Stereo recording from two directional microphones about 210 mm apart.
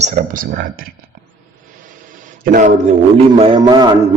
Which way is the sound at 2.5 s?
40° right (ahead or behind).